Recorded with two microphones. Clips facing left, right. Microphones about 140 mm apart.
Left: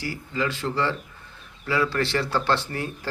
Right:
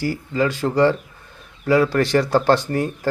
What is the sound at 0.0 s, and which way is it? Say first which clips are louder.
Speech: right 7 dB; 40° right (ahead or behind).